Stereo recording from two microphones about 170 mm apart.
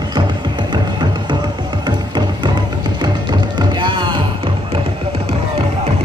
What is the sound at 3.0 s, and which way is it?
Music, 25° right (ahead or behind).